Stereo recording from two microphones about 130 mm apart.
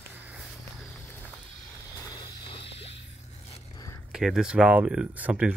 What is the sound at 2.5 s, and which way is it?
Music, 45° left (ahead or behind).